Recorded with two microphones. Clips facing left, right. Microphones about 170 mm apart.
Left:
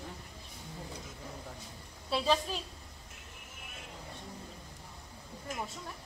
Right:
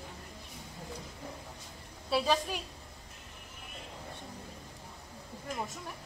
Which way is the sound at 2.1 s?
10° right (ahead or behind).